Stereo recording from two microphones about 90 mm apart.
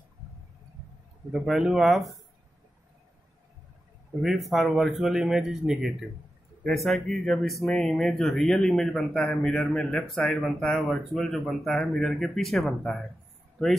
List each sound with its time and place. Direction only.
1.3 s speech: 5° right (ahead or behind)
4.2 s speech: centre (ahead or behind)